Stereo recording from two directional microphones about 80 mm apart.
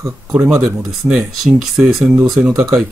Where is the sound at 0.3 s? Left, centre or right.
Right.